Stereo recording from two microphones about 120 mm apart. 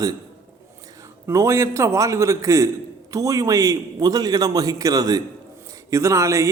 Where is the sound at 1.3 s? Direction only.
25° right (ahead or behind).